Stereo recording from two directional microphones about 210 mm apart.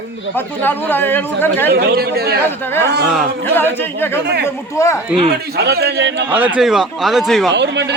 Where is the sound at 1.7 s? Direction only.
50° right (ahead or behind).